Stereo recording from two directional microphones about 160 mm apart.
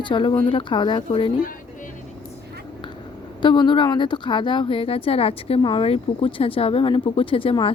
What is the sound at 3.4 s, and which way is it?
Speech, 30° left (ahead or behind).